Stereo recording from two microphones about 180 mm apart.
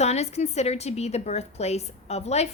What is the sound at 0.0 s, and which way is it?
A woman's voice, 35° left (ahead or behind).